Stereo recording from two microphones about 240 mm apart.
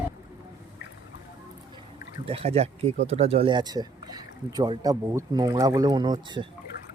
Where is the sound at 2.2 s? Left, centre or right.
Right.